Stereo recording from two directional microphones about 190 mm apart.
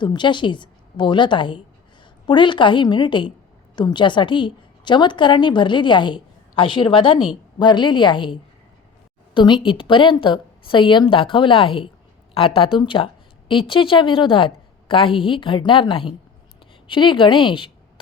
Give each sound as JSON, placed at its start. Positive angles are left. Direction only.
{"t": 0.0, "sound": "a woman's voice", "side_deg": 25}